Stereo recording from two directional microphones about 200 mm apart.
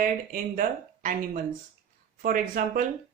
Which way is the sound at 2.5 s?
40° right (ahead or behind).